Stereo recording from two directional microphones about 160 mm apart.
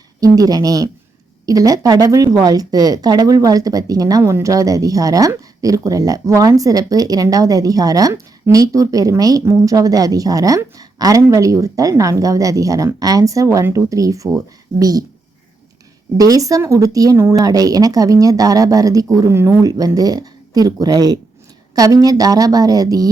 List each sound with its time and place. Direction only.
0.2 s speech: 20° right (ahead or behind)
16.1 s speech: 20° right (ahead or behind)